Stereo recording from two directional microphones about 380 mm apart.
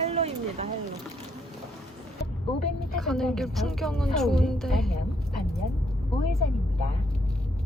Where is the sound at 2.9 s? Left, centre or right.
Centre.